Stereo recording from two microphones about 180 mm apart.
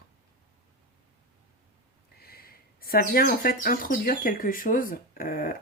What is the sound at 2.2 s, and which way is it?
Speech, 60° left (ahead or behind).